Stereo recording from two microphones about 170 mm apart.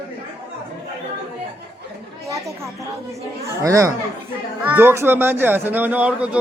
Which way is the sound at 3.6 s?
20° right (ahead or behind).